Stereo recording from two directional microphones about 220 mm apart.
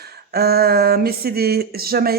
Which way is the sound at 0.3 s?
45° right (ahead or behind).